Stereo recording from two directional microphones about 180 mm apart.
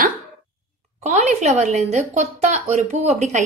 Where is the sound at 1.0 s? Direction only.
40° right (ahead or behind).